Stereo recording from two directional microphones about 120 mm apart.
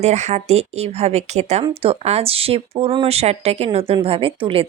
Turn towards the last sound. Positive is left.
turn(degrees=-50)  # may be behind; listen again after turning